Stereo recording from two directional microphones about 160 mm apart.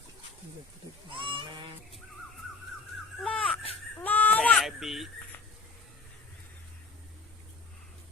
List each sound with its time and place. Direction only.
1.1 s goat: 30° right (ahead or behind)
3.2 s crying: 5° left (ahead or behind)
4.0 s baby cry: 10° left (ahead or behind)
4.6 s a sound: centre (ahead or behind)